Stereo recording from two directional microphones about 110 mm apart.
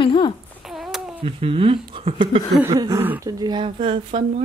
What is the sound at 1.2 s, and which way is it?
Speech, 60° right (ahead or behind).